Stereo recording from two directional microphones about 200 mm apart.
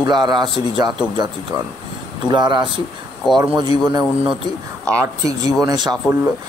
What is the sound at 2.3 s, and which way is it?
Speech, 20° right (ahead or behind).